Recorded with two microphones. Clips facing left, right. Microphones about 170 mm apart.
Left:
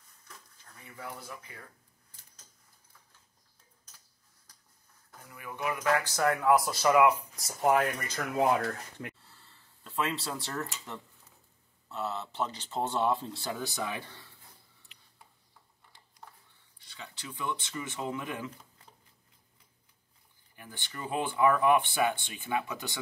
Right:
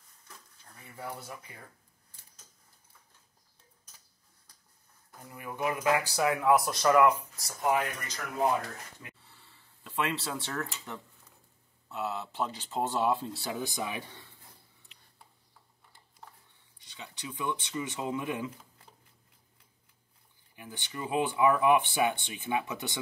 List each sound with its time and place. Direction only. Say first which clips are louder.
5.4 s speech: right 2 dB; 25° right (ahead or behind)
5.9 s speech: even; 15° right (ahead or behind); by 7.2 s 10° left (ahead or behind)
7.6 s speech: left 3 dB; 40° left (ahead or behind)
9.2 s gasp: even; centre (ahead or behind)
11.9 s speech: right 1 dB; centre (ahead or behind); by 14.3 s 20° right (ahead or behind)
16.8 s speech: right 2 dB; 20° right (ahead or behind)
20.5 s speech: right 3 dB; 15° right (ahead or behind)